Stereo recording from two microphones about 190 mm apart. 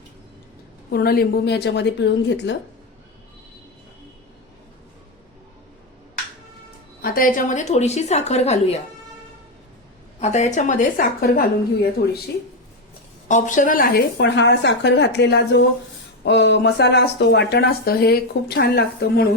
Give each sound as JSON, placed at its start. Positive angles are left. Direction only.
{"t": 0.9, "sound": "speech", "side_deg": 55}
{"t": 7.0, "sound": "a woman's voice", "side_deg": 50}
{"t": 10.2, "sound": "a woman's voice", "side_deg": 40}
{"t": 13.2, "sound": "speech", "side_deg": 40}